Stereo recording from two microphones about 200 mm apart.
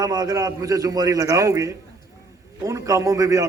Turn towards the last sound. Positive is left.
turn(degrees=-15)  # may be behind; listen again after turning